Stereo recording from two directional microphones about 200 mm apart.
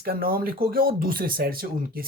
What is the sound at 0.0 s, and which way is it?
Speech, 50° right (ahead or behind).